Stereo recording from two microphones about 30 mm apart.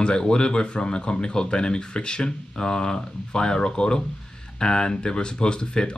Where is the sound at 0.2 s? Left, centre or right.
Left.